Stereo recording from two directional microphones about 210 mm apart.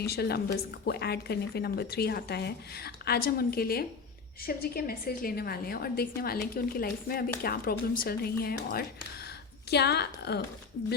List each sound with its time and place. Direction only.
0.0 s a woman's voice: 50° left (ahead or behind)